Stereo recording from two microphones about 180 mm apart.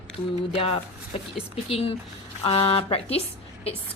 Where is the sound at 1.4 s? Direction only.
35° left (ahead or behind).